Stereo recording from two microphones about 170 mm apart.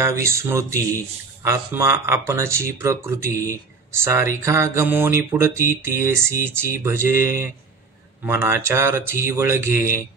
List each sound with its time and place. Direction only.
0.0 s speech: 15° right (ahead or behind)